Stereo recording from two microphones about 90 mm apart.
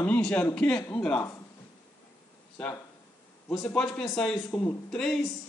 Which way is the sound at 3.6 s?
15° left (ahead or behind).